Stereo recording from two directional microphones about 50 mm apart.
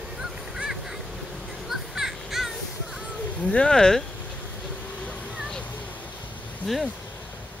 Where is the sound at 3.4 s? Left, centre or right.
Left.